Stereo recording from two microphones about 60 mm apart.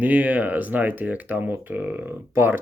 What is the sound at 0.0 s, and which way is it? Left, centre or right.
Speech, right.